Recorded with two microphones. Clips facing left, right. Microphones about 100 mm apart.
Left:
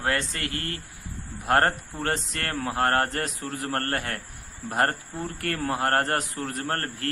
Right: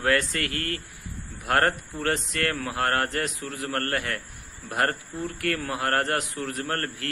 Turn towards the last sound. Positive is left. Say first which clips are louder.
# even
turn(degrees=35)  # may be behind; listen again after turning